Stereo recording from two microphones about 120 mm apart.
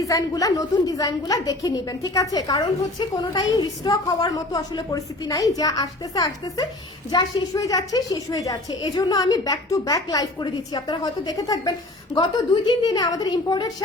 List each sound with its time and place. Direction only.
0.0 s a woman's voice: 30° left (ahead or behind)